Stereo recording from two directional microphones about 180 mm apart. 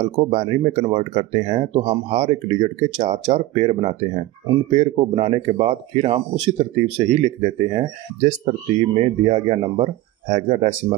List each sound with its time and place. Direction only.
0.0 s speech: 35° right (ahead or behind)